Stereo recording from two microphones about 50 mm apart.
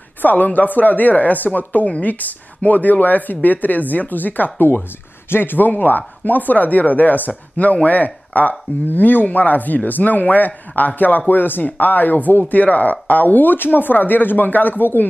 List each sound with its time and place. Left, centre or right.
0.2 s speech: left